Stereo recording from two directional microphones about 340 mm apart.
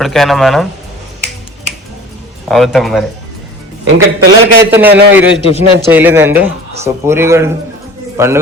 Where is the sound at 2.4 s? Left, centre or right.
Centre.